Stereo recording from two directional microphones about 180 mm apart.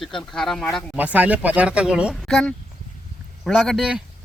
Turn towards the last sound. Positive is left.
turn(degrees=0)  # may be behind; listen again after turning